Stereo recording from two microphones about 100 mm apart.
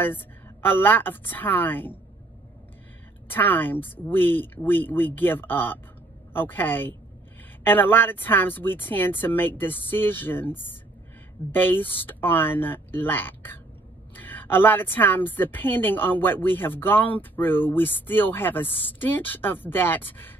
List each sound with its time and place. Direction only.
0.0 s a woman's voice: 20° left (ahead or behind)
3.3 s a woman's voice: 20° left (ahead or behind)